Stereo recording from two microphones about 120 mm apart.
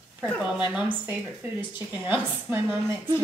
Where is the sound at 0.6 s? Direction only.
15° right (ahead or behind).